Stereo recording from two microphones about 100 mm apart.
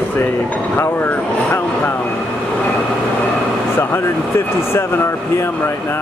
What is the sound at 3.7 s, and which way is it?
Speech, 25° left (ahead or behind).